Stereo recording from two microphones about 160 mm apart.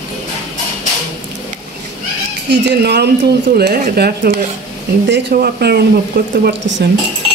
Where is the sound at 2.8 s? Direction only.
90° right.